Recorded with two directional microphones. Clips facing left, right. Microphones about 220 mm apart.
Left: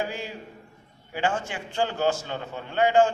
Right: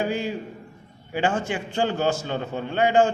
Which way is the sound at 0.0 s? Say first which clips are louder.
Right 6 dB; 20° right (ahead or behind).